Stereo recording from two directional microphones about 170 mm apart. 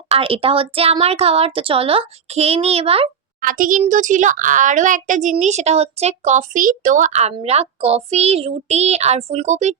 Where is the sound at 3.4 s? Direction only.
50° right (ahead or behind).